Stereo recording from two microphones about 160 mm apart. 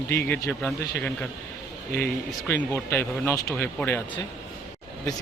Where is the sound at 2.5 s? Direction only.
15° left (ahead or behind).